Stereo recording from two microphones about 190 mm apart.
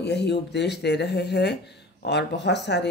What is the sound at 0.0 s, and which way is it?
Speech, 65° left (ahead or behind).